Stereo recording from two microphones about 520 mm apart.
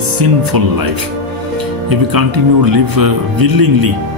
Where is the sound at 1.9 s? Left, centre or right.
Right.